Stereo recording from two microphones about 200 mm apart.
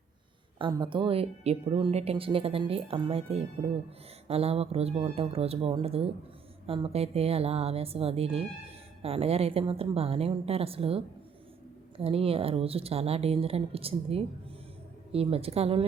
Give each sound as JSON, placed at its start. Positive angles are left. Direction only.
{"t": 0.6, "sound": "speech", "side_deg": -25}